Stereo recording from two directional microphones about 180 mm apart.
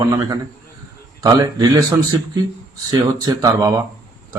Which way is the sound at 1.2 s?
20° right (ahead or behind).